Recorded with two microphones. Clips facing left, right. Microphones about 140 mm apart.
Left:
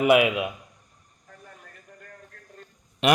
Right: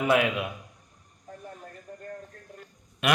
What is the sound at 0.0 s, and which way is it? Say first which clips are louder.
Speech: left 5 dB; 15° left (ahead or behind).